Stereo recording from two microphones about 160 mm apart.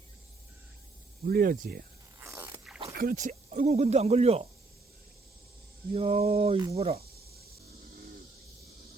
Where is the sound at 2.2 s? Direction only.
15° right (ahead or behind).